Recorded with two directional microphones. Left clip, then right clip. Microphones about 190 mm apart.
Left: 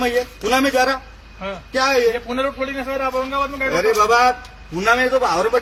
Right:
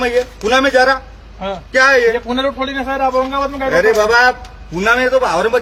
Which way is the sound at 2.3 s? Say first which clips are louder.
Right 4 dB; 40° right (ahead or behind).